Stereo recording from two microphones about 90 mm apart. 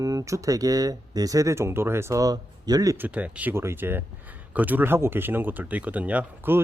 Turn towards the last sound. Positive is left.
turn(degrees=-20)  # may be behind; listen again after turning